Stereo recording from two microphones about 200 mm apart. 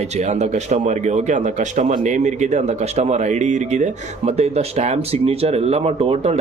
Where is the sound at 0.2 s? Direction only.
35° right (ahead or behind).